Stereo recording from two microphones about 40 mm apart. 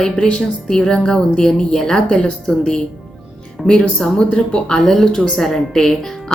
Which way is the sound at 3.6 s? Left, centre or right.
Left.